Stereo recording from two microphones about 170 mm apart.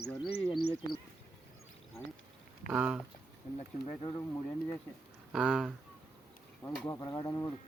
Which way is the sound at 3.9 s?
30° left (ahead or behind).